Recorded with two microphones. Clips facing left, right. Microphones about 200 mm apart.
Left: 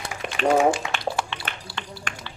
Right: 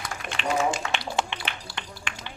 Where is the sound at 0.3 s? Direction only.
50° left (ahead or behind).